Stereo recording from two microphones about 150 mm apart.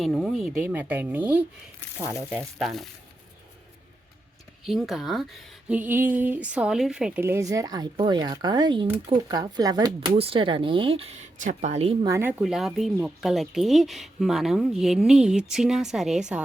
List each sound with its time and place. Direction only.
0.0 s a woman's voice: centre (ahead or behind)
2.1 s speech: centre (ahead or behind)
4.6 s a woman's voice: centre (ahead or behind); by 10.1 s 25° right (ahead or behind)
10.2 s speech: 40° right (ahead or behind)
11.3 s speech: 55° right (ahead or behind)
12.0 s speech: 20° right (ahead or behind)
12.4 s speech: centre (ahead or behind)